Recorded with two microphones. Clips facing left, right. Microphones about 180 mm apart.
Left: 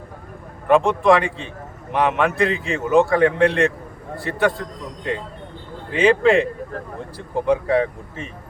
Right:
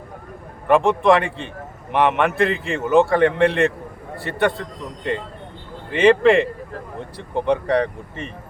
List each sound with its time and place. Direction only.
0.7 s a man's voice: centre (ahead or behind)
5.9 s a man's voice: centre (ahead or behind)